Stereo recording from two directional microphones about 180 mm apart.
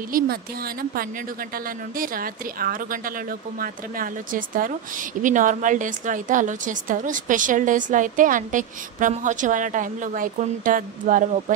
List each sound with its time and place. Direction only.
0.1 s speech: 50° right (ahead or behind)
2.0 s speech: 50° right (ahead or behind)